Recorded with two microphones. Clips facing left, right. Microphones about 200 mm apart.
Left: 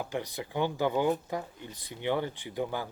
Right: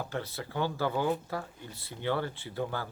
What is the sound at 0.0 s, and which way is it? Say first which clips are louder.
Speech: left 2 dB; 15° left (ahead or behind).